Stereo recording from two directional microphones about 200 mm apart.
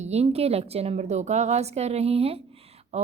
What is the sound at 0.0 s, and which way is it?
A woman's voice, 30° right (ahead or behind).